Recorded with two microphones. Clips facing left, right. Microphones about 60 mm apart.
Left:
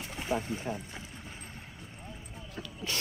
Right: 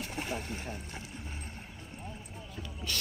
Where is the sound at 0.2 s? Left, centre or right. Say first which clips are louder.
Left 6 dB; right.